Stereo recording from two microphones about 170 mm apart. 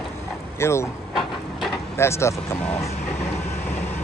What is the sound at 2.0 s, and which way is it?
Speech, 15° left (ahead or behind).